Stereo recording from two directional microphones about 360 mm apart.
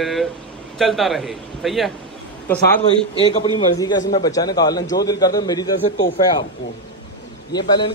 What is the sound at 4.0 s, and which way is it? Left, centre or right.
Speech, left.